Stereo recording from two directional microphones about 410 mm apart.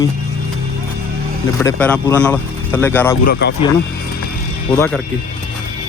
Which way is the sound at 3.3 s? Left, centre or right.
Left.